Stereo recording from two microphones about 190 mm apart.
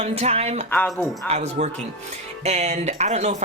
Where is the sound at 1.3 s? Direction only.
35° right (ahead or behind).